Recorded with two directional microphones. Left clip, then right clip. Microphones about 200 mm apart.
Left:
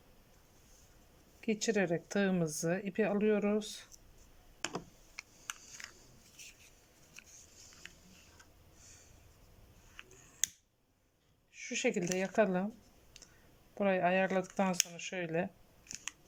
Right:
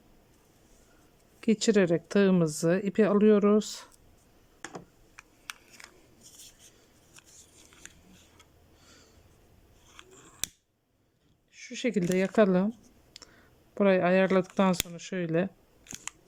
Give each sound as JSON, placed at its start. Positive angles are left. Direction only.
{"t": 1.4, "sound": "speech", "side_deg": -25}
{"t": 4.6, "sound": "computer keyboard", "side_deg": 10}
{"t": 11.5, "sound": "a sound", "side_deg": -25}
{"t": 12.1, "sound": "speech", "side_deg": -25}
{"t": 13.2, "sound": "whispering", "side_deg": -25}
{"t": 13.7, "sound": "speech", "side_deg": -25}